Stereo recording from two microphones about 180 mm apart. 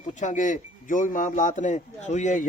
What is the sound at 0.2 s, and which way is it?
A man's voice, 45° left (ahead or behind).